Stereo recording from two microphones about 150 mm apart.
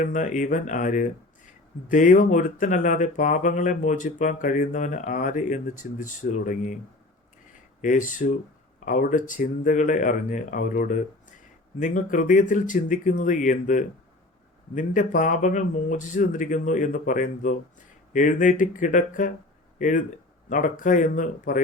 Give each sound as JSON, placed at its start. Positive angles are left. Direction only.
{"t": 0.0, "sound": "speech", "side_deg": 60}
{"t": 7.8, "sound": "speech", "side_deg": 60}